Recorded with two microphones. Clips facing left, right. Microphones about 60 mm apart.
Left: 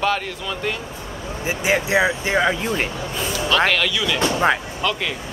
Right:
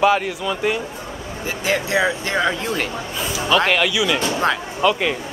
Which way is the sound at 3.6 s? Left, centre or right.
Centre.